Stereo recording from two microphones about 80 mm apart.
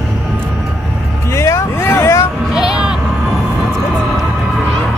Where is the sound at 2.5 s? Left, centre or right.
Centre.